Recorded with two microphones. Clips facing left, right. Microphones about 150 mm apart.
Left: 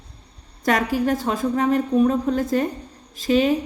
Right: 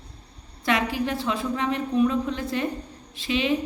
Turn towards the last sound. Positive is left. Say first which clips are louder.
# left 7 dB
turn(degrees=40)  # may be behind; listen again after turning